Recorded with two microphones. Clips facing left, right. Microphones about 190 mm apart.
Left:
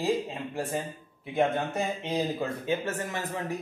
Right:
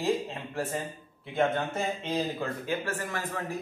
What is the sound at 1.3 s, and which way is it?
Speech, 15° left (ahead or behind).